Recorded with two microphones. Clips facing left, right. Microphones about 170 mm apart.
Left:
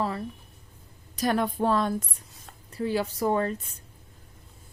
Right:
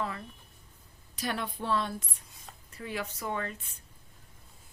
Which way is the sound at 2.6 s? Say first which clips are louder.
Left 10 dB; 35° left (ahead or behind).